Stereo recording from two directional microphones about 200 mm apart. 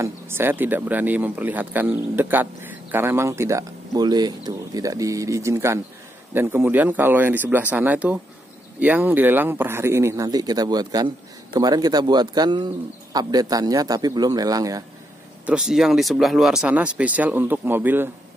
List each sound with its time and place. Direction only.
0.0 s speech: 10° right (ahead or behind)
15.4 s speech: 5° right (ahead or behind)